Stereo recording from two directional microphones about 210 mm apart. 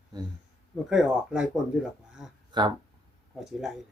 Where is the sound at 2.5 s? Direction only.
20° right (ahead or behind).